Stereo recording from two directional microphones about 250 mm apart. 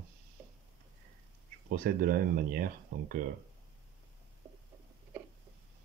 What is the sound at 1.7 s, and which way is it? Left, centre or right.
Speech, right.